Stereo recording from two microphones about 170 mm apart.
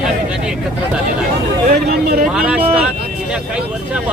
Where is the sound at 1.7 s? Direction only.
65° right (ahead or behind).